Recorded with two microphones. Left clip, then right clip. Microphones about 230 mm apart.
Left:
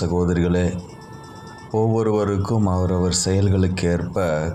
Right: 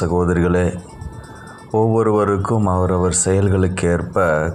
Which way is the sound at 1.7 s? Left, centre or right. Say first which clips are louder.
Right 4 dB; centre.